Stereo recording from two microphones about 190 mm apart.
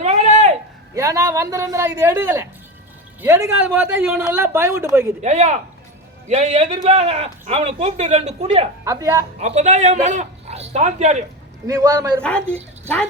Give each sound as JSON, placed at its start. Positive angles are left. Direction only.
{"t": 0.0, "sound": "a sound", "side_deg": -35}
{"t": 0.9, "sound": "speech", "side_deg": -15}
{"t": 5.2, "sound": "speech", "side_deg": -35}
{"t": 8.8, "sound": "a man's voice", "side_deg": -15}
{"t": 9.4, "sound": "a man's voice", "side_deg": -35}
{"t": 11.6, "sound": "speech", "side_deg": -15}
{"t": 12.2, "sound": "speech", "side_deg": 5}